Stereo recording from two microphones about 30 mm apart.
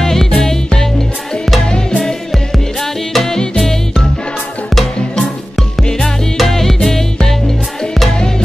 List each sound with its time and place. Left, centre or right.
0.0 s music: centre; by 2.1 s left
2.3 s music: centre
6.3 s music: centre